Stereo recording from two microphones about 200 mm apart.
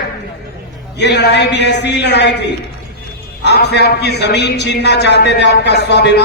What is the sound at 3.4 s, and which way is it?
A man's voice, 55° left (ahead or behind).